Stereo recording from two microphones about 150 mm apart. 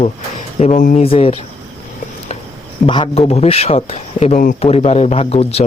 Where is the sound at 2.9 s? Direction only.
35° left (ahead or behind).